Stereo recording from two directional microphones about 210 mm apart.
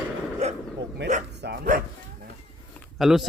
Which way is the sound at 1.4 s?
50° right (ahead or behind).